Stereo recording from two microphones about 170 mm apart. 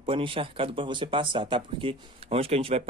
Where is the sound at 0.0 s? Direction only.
30° right (ahead or behind).